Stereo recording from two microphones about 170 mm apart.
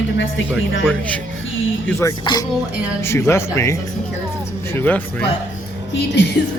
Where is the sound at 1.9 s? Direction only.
20° left (ahead or behind).